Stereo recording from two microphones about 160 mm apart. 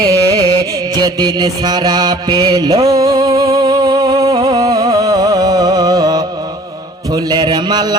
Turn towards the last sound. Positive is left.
turn(degrees=-25)  # may be behind; listen again after turning